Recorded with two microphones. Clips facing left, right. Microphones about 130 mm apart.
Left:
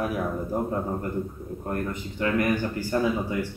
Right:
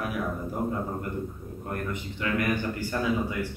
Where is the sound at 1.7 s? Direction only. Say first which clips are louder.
Left 3 dB; 35° left (ahead or behind).